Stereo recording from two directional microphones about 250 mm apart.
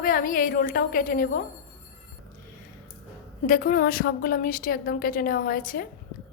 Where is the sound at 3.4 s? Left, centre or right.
Left.